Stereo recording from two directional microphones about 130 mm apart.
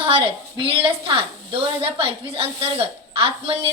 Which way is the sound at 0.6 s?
45° right (ahead or behind).